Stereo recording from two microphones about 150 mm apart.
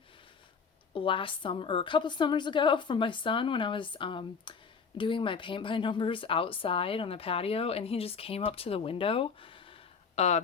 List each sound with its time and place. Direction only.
0.9 s speech: 35° left (ahead or behind)